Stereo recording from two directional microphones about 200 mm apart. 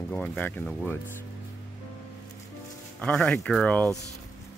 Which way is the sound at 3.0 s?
5° left (ahead or behind).